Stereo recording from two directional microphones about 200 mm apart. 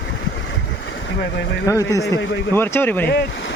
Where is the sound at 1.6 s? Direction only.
15° left (ahead or behind).